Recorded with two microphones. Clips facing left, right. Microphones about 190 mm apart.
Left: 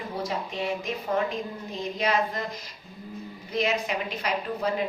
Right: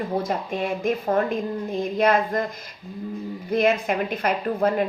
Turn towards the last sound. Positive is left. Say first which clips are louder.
# right 6 dB
turn(degrees=-55)  # may be behind; listen again after turning